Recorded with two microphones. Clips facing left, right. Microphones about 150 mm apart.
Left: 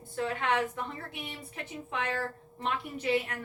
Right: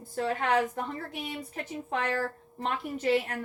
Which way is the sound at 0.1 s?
40° right (ahead or behind).